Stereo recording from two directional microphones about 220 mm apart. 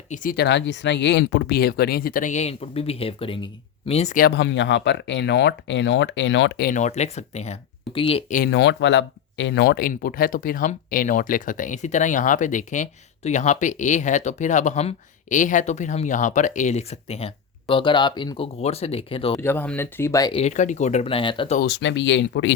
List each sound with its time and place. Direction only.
0.1 s speech: 40° left (ahead or behind)
4.3 s speech: 55° left (ahead or behind)
6.7 s speech: 35° left (ahead or behind)
8.4 s speech: 55° left (ahead or behind); by 19.3 s 25° left (ahead or behind)
19.4 s speech: 10° left (ahead or behind)
20.4 s speech: 35° left (ahead or behind)
21.6 s speech: 55° left (ahead or behind)